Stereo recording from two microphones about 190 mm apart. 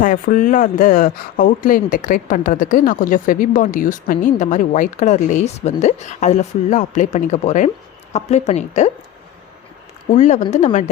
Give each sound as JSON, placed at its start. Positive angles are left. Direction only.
{"t": 0.0, "sound": "a woman's voice", "side_deg": 45}
{"t": 10.1, "sound": "a woman's voice", "side_deg": 40}